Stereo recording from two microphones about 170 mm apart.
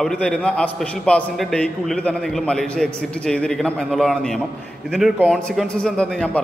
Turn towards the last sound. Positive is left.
turn(degrees=5)  # may be behind; listen again after turning